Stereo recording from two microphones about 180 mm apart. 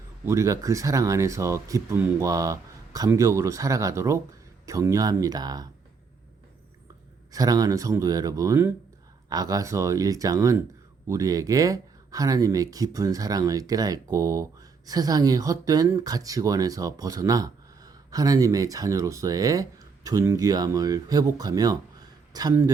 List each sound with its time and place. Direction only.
0.3 s speech: 15° right (ahead or behind)
7.3 s a man's voice: 20° right (ahead or behind)